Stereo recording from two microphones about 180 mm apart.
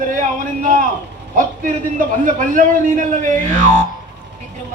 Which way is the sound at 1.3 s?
50° right (ahead or behind).